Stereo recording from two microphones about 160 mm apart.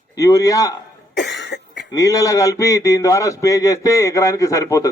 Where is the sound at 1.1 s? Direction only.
90° left.